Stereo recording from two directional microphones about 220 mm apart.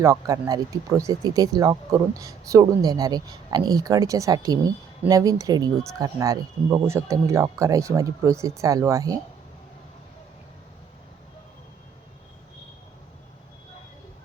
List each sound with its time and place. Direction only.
0.0 s speech: 15° right (ahead or behind)